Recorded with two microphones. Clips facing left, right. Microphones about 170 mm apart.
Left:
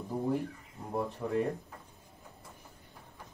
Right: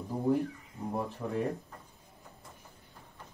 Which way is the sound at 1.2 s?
5° left (ahead or behind).